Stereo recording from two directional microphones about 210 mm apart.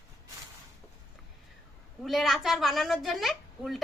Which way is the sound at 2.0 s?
Centre (ahead or behind).